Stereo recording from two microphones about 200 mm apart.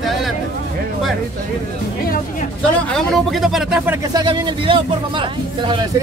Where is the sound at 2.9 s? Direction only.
Centre (ahead or behind).